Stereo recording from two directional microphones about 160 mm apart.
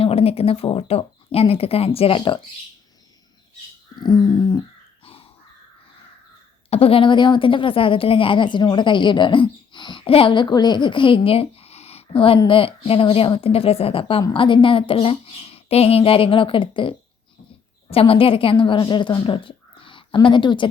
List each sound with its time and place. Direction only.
0.0 s a woman's voice: 40° left (ahead or behind)
4.0 s a sound: 25° left (ahead or behind)
6.7 s a woman's voice: 40° left (ahead or behind)
17.9 s a woman's voice: 35° left (ahead or behind)